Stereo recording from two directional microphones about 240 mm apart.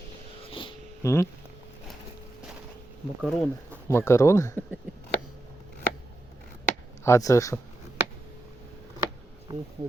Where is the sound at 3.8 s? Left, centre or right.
Centre.